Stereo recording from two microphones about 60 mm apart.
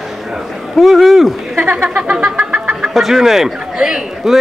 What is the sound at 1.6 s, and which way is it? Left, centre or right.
Speech, right.